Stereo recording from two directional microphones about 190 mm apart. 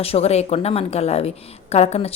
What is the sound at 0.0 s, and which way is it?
A woman's voice, 30° left (ahead or behind).